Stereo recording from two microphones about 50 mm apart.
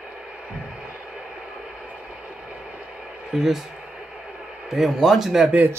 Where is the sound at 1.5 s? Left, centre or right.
Centre.